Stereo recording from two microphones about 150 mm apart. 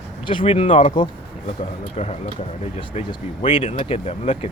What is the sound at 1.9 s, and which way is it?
Speech, 45° left (ahead or behind).